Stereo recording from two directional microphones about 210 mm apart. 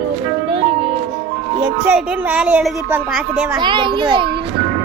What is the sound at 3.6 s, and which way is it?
Speech, 20° right (ahead or behind).